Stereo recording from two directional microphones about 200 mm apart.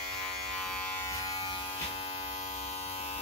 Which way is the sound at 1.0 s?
15° left (ahead or behind).